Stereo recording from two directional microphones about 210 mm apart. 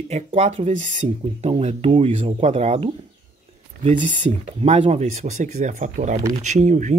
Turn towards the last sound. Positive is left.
turn(degrees=-35)  # may be behind; listen again after turning